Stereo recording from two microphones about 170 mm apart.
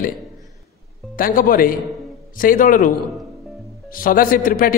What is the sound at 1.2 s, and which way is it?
A man's voice, 55° left (ahead or behind).